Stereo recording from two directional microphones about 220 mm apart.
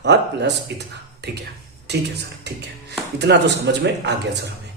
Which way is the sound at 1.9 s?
50° right (ahead or behind).